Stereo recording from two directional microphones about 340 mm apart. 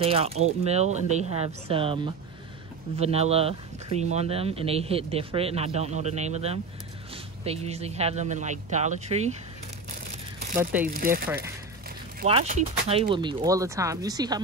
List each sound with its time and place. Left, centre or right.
0.0 s speech: centre
10.6 s speech: centre
12.2 s speech: centre